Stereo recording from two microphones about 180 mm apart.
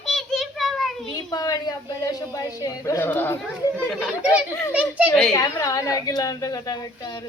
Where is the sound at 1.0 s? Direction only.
20° left (ahead or behind).